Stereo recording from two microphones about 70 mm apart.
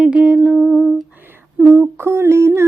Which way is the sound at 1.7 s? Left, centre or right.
Right.